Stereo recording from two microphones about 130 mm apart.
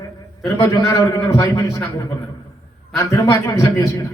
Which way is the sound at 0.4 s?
20° left (ahead or behind).